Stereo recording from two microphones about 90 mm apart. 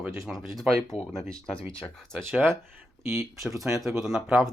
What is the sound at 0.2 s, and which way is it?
Speech, centre (ahead or behind).